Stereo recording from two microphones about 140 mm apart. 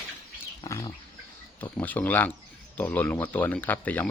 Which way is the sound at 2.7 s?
10° left (ahead or behind).